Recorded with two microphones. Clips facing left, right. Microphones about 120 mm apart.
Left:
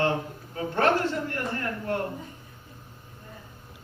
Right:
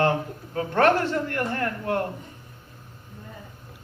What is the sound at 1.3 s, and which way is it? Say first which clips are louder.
Speech: right 4 dB; 65° right (ahead or behind).